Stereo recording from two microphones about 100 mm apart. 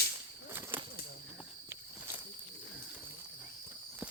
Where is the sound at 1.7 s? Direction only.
20° right (ahead or behind).